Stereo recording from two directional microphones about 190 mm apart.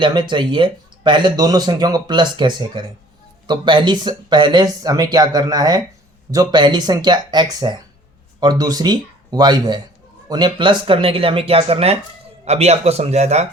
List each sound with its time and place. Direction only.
0.0 s speech: 25° right (ahead or behind)